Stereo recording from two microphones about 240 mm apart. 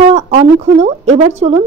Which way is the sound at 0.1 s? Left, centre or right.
Right.